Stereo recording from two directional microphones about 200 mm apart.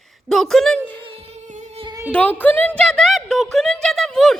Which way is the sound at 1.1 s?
30° right (ahead or behind).